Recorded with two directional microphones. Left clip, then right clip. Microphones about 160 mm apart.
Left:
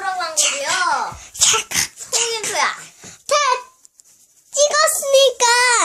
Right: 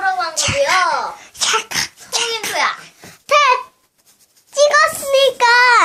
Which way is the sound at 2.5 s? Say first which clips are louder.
Right 2 dB; 40° left (ahead or behind).